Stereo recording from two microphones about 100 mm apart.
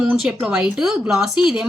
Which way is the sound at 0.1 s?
5° right (ahead or behind).